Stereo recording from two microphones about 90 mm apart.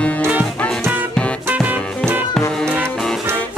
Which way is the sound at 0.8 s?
20° right (ahead or behind).